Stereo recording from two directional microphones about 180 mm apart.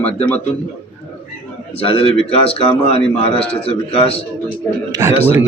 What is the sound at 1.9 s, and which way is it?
A man's voice, 30° left (ahead or behind).